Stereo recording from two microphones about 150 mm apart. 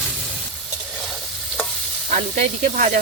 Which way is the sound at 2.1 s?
55° right (ahead or behind).